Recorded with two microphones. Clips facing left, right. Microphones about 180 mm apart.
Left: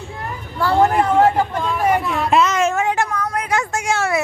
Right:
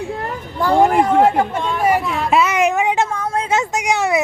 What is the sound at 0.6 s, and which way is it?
Speech, 15° right (ahead or behind).